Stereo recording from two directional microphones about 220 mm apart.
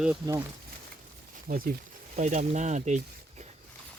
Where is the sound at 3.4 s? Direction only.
30° right (ahead or behind).